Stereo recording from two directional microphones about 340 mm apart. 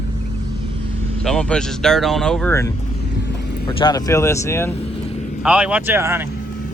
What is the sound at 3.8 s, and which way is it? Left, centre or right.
Speech, centre.